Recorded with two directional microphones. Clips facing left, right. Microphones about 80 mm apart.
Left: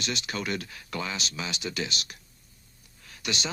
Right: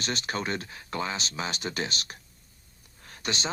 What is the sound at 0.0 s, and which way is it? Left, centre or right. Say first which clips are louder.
Speech: right 1 dB; right.